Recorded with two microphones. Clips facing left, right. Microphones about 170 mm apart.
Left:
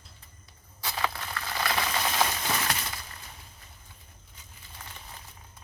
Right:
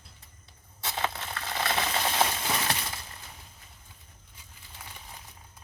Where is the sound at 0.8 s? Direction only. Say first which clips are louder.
Even; 25° right (ahead or behind).